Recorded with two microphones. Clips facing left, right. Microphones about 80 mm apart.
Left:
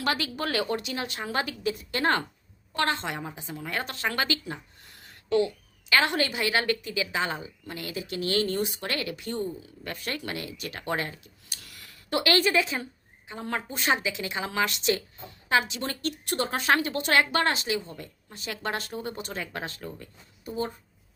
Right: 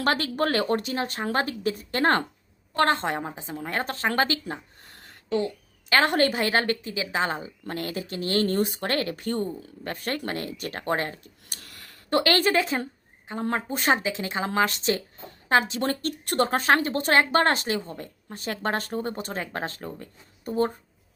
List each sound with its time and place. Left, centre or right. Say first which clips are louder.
0.0 s speech: right 5 dB; right
7.7 s speech: right 4 dB; right
9.8 s speech: right 4 dB; right